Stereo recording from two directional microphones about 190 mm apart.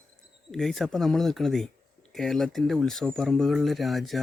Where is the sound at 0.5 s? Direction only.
Centre (ahead or behind).